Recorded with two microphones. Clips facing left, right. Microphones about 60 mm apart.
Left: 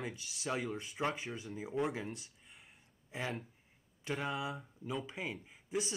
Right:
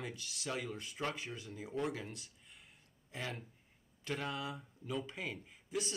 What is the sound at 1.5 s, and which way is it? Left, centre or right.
Speech, centre.